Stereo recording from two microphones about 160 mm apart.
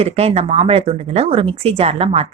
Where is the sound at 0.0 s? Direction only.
40° right (ahead or behind).